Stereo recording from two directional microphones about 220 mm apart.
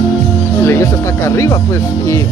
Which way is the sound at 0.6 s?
10° left (ahead or behind).